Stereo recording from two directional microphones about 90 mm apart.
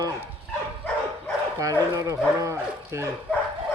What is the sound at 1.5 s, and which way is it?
Speech, 40° right (ahead or behind).